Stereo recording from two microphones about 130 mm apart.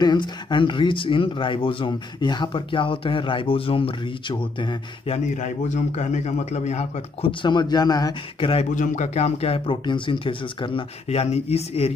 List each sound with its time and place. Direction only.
0.0 s speech: 35° left (ahead or behind)
5.3 s a man's voice: 70° left (ahead or behind); by 8.5 s 30° left (ahead or behind)
8.7 s speech: 70° left (ahead or behind); by 11.9 s 50° left (ahead or behind)